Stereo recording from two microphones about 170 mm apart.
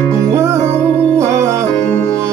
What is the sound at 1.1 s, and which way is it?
Music, 20° right (ahead or behind).